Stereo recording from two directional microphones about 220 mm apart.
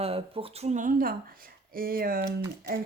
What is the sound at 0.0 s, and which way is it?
Speech, 25° right (ahead or behind).